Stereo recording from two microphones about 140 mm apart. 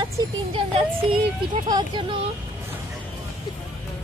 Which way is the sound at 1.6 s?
30° right (ahead or behind).